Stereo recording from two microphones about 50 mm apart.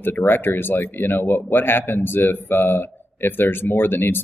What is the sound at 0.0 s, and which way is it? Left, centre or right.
Speech, left.